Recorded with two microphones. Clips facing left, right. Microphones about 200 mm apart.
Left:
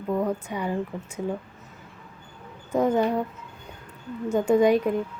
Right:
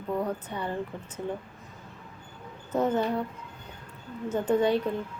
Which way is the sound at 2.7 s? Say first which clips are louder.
Left 4 dB; 10° left (ahead or behind).